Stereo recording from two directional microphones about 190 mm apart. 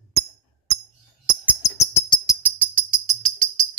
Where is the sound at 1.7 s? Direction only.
15° left (ahead or behind).